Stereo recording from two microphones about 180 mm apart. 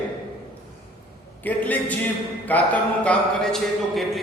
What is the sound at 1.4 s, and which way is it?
A man's voice, 10° left (ahead or behind).